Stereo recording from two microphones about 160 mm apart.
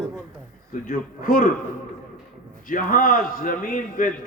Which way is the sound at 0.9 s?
60° left (ahead or behind).